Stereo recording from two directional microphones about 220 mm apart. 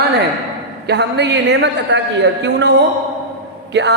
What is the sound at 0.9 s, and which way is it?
A woman's voice, 50° right (ahead or behind).